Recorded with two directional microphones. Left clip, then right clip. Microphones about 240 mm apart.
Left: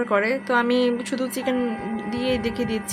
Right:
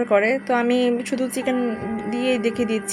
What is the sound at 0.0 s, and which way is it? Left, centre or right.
A woman's voice, centre.